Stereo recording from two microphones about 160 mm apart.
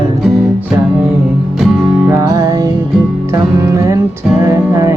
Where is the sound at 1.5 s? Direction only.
Centre (ahead or behind).